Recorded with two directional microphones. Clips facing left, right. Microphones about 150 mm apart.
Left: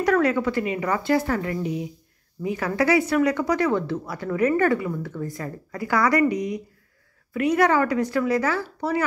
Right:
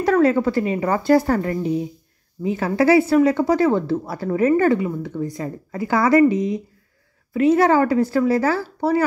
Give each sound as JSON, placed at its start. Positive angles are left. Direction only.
{"t": 0.0, "sound": "speech", "side_deg": -30}